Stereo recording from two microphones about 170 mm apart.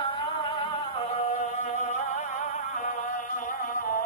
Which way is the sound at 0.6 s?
40° left (ahead or behind).